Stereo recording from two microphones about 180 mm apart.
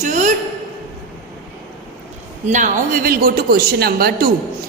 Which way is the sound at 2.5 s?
45° right (ahead or behind).